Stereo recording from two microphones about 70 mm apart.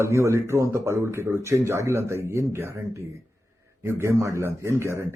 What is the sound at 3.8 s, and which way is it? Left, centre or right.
Speech, right.